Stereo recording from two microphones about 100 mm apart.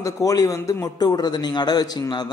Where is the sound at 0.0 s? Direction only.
35° left (ahead or behind).